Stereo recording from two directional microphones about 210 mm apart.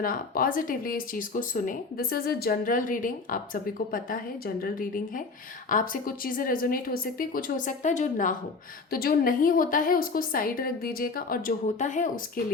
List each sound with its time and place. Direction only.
0.0 s a woman's voice: 40° left (ahead or behind)